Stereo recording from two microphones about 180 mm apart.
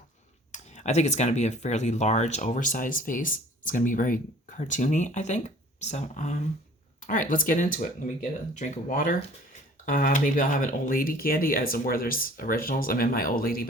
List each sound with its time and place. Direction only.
0.5 s speech: 40° left (ahead or behind)